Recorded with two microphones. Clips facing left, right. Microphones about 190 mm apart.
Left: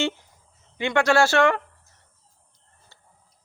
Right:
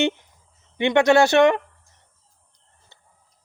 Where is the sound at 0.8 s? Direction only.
20° right (ahead or behind).